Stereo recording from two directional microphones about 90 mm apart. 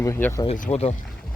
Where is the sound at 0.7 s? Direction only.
70° left (ahead or behind).